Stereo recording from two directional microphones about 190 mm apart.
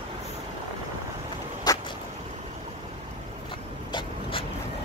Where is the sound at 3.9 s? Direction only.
25° left (ahead or behind).